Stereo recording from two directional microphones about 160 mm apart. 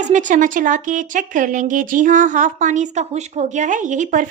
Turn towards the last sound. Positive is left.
turn(degrees=-50)  # may be behind; listen again after turning